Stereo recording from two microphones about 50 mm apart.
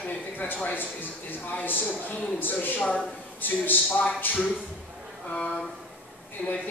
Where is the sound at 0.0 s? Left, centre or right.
Left.